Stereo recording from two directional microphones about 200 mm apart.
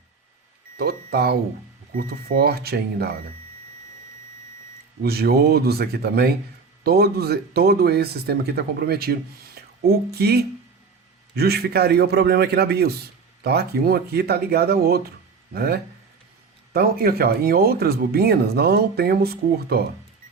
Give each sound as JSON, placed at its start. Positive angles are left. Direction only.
{"t": 0.8, "sound": "a man's voice", "side_deg": -50}
{"t": 5.0, "sound": "a man's voice", "side_deg": -50}